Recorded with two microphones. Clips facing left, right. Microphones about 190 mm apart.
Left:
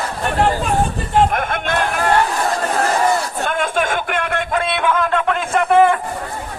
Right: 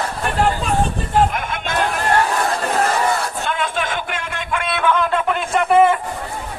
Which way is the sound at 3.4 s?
50° left (ahead or behind).